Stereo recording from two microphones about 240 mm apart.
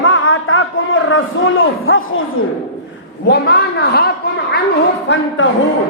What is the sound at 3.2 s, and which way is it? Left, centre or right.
A woman's voice, left.